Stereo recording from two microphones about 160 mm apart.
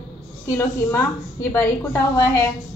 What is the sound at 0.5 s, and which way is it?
A woman's voice, 15° left (ahead or behind).